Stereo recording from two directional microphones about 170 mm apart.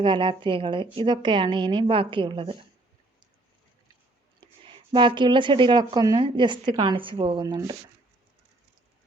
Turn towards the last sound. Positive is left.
turn(degrees=-20)  # may be behind; listen again after turning